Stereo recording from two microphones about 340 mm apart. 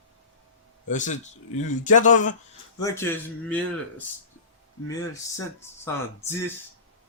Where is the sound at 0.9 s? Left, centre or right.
Left.